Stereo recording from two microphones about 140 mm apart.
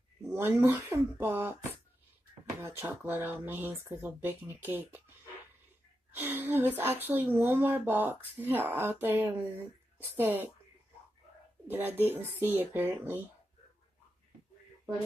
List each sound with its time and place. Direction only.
0.2 s a woman's voice: 15° right (ahead or behind)
6.1 s a woman's voice: 15° right (ahead or behind)
11.6 s a woman's voice: 15° right (ahead or behind)